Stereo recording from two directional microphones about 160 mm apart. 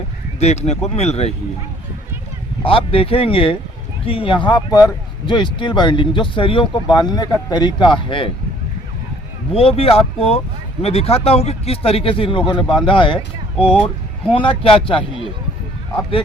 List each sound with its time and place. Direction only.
0.3 s speech: 40° left (ahead or behind)
2.6 s speech: 35° left (ahead or behind)
9.5 s speech: 35° left (ahead or behind)
14.3 s speech: 35° left (ahead or behind)